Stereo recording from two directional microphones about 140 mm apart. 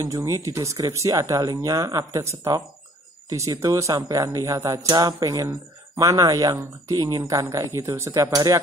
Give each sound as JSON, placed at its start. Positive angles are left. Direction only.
{"t": 0.0, "sound": "speech", "side_deg": -25}